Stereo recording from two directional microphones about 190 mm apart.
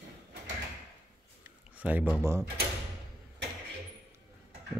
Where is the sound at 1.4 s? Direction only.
10° right (ahead or behind).